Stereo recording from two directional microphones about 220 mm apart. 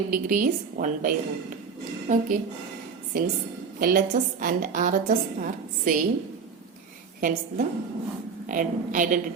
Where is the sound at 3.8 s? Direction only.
40° right (ahead or behind).